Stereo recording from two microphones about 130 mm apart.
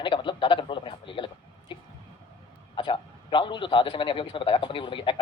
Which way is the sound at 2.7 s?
40° left (ahead or behind).